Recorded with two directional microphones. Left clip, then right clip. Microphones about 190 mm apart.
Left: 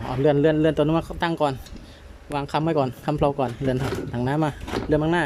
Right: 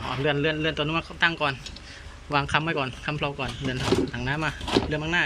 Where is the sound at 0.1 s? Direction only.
30° left (ahead or behind).